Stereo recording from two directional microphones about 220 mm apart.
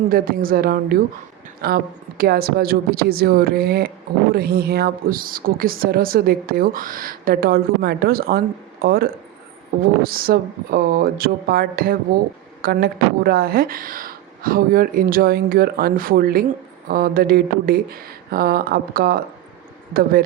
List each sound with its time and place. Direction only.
0.1 s a woman's voice: 40° right (ahead or behind)